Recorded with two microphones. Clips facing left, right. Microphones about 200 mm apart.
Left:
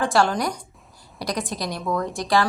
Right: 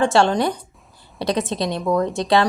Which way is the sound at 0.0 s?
25° right (ahead or behind).